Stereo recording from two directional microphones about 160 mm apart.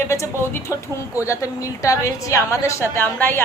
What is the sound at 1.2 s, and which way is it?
A woman's voice, 20° left (ahead or behind).